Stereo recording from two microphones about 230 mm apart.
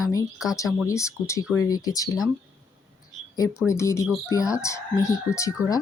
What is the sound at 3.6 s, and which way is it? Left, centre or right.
Speech, centre.